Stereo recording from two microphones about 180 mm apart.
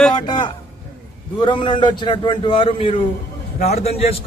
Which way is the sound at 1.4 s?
25° left (ahead or behind).